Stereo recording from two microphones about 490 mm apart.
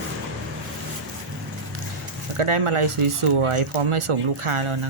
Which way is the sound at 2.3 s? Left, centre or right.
Right.